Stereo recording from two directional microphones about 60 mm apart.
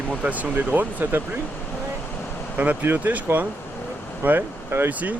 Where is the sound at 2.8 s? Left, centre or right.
Right.